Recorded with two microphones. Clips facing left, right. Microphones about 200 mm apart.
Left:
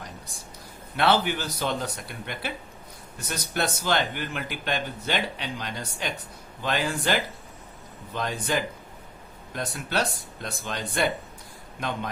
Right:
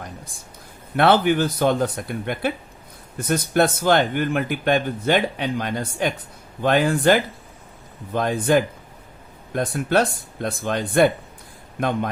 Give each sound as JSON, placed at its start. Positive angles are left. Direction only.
{"t": 0.9, "sound": "speech", "side_deg": -55}